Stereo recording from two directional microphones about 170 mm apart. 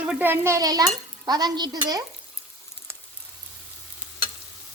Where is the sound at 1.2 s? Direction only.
25° right (ahead or behind).